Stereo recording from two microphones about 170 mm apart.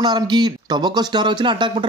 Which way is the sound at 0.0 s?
25° right (ahead or behind).